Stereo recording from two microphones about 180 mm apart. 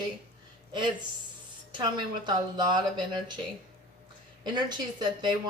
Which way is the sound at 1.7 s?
25° right (ahead or behind).